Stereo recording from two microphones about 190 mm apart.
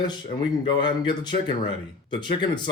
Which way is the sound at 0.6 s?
25° left (ahead or behind).